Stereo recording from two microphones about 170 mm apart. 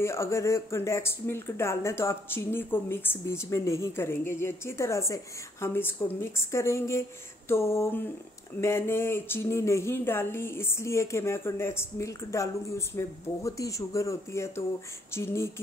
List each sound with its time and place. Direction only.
0.0 s speech: 15° left (ahead or behind)